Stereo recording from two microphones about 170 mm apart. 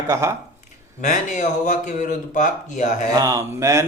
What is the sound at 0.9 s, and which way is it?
Speech, 45° left (ahead or behind).